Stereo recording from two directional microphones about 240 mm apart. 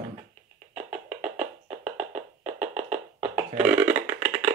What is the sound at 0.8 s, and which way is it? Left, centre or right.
Music, right.